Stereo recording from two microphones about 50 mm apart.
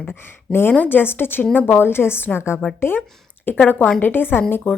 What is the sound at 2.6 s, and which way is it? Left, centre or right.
A woman's voice, left.